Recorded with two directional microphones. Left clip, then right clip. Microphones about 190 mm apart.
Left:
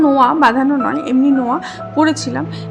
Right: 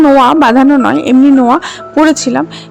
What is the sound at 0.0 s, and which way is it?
A woman's voice, 45° right (ahead or behind).